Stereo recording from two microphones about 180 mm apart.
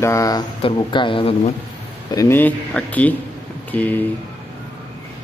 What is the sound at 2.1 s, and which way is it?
Speech, 15° left (ahead or behind).